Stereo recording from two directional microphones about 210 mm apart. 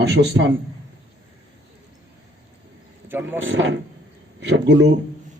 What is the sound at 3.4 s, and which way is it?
A man's voice, 60° right (ahead or behind).